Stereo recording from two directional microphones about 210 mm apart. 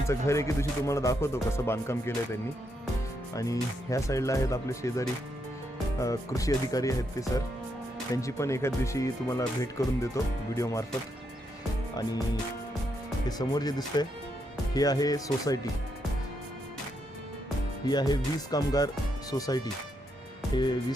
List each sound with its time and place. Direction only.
0.1 s speech: 15° left (ahead or behind)
3.3 s speech: 15° left (ahead or behind)
13.2 s speech: 20° left (ahead or behind)
17.8 s speech: 20° left (ahead or behind)